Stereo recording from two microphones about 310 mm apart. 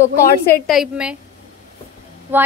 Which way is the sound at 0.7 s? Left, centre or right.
Centre.